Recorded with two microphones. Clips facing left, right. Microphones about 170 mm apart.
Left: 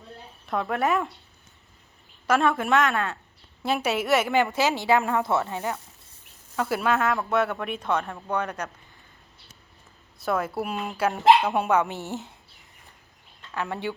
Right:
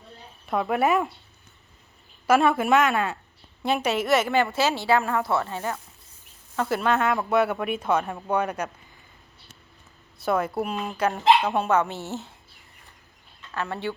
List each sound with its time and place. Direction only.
0.4 s speech: 5° right (ahead or behind)
2.2 s speech: 5° right (ahead or behind)
2.9 s speech: 15° right (ahead or behind)
3.6 s a woman's voice: centre (ahead or behind)
6.6 s speech: 5° left (ahead or behind)
10.2 s a woman's voice: centre (ahead or behind); by 12.3 s 15° left (ahead or behind)
13.6 s a woman's voice: 15° left (ahead or behind)